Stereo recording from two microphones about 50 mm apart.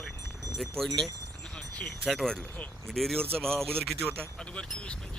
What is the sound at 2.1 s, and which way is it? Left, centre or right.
Speech, centre.